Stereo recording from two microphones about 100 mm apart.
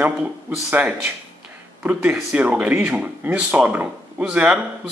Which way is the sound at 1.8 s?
15° right (ahead or behind).